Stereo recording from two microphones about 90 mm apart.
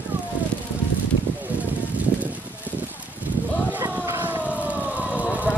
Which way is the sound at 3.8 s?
25° right (ahead or behind).